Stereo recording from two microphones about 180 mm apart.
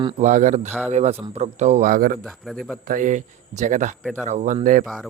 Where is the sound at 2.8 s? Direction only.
50° right (ahead or behind).